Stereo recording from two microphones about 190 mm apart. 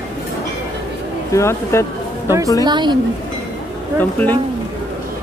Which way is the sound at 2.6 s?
25° right (ahead or behind).